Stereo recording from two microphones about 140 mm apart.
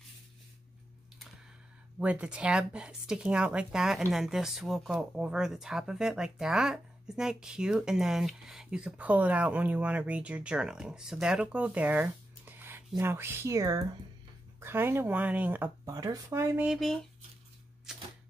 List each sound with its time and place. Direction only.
2.0 s speech: 10° right (ahead or behind)
15.8 s speech: 25° right (ahead or behind)
16.6 s speech: centre (ahead or behind)
17.9 s typewriter: 5° right (ahead or behind)